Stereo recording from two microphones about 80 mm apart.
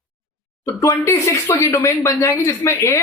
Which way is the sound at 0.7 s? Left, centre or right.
Left.